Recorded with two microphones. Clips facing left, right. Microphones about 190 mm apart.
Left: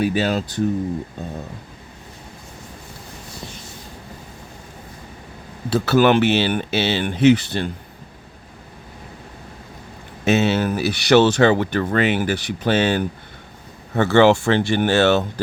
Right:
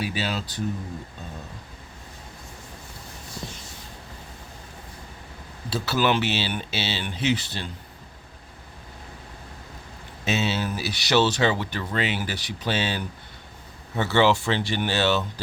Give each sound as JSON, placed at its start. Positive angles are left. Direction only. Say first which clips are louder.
{"t": 0.0, "sound": "speech", "louder": "left 9 dB", "side_deg": 50}
{"t": 5.7, "sound": "speech", "louder": "left 8 dB", "side_deg": 55}
{"t": 10.2, "sound": "speech", "louder": "left 8 dB", "side_deg": 55}